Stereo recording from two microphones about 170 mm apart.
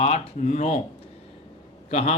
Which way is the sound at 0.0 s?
45° left (ahead or behind).